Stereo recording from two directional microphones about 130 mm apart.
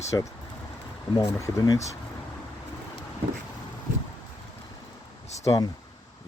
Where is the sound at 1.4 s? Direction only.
25° left (ahead or behind).